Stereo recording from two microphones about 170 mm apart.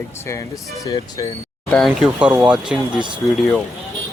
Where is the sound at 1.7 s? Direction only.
Centre (ahead or behind).